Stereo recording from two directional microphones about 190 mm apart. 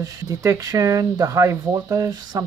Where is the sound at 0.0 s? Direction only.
15° right (ahead or behind).